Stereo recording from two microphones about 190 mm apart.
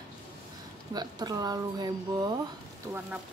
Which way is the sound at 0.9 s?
20° right (ahead or behind).